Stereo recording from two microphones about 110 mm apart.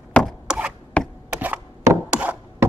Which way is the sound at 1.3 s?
15° right (ahead or behind).